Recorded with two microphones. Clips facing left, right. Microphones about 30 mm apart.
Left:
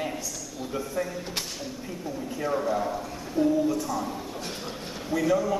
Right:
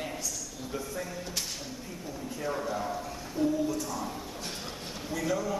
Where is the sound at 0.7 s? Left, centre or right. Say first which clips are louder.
Left 6 dB; left.